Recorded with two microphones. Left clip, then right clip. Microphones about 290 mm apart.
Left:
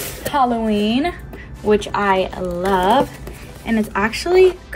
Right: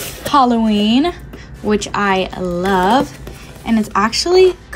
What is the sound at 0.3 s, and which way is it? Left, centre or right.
Speech, right.